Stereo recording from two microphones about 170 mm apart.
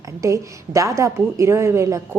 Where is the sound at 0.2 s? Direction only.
20° right (ahead or behind).